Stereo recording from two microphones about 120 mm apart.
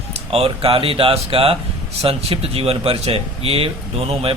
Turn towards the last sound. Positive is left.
turn(degrees=-50)  # may be behind; listen again after turning